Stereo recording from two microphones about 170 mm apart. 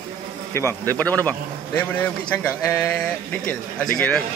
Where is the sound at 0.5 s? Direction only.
15° left (ahead or behind).